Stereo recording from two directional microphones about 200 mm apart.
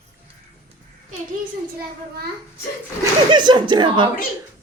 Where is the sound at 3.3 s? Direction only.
20° right (ahead or behind).